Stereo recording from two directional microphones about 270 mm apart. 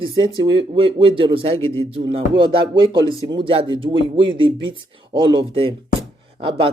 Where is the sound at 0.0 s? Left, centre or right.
Centre.